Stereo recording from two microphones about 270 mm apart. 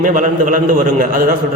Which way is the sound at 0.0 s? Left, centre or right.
Right.